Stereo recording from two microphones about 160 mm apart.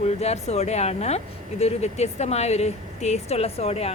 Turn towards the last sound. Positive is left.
turn(degrees=40)  # may be behind; listen again after turning